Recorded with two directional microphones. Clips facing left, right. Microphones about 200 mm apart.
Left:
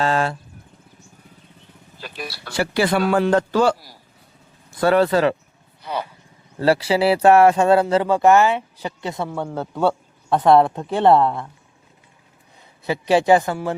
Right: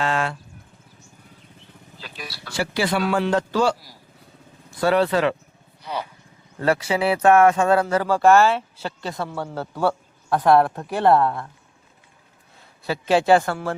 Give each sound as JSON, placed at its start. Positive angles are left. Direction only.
{"t": 0.0, "sound": "a sound", "side_deg": 35}
{"t": 2.0, "sound": "a man's voice", "side_deg": 55}
{"t": 4.8, "sound": "a man's voice", "side_deg": 50}
{"t": 5.8, "sound": "speech", "side_deg": 55}
{"t": 6.6, "sound": "speech", "side_deg": 30}
{"t": 12.8, "sound": "speech", "side_deg": 15}